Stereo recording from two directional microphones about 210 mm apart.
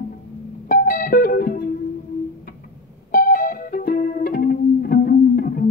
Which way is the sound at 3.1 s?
40° left (ahead or behind).